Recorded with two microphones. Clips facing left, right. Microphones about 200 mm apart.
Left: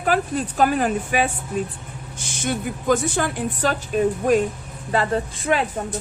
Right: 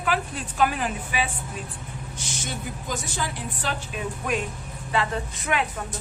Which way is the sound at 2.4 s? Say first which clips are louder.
Left 13 dB; 55° left (ahead or behind).